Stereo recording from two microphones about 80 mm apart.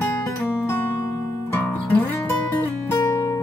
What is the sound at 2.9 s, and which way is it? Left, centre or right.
Music, left.